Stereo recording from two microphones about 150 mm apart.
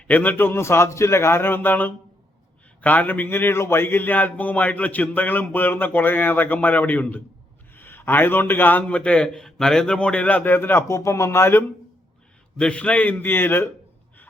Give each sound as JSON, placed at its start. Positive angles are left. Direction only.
{"t": 0.1, "sound": "a man's voice", "side_deg": 10}
{"t": 12.5, "sound": "a man's voice", "side_deg": 5}